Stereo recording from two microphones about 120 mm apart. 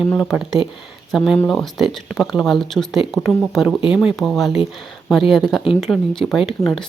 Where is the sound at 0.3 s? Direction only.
Centre (ahead or behind).